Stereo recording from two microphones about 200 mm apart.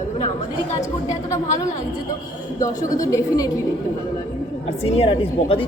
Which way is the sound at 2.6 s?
15° left (ahead or behind).